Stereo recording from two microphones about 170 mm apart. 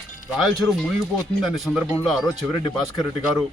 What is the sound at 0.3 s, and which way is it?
Speech, centre (ahead or behind).